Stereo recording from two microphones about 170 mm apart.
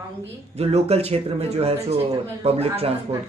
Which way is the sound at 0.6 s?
40° right (ahead or behind).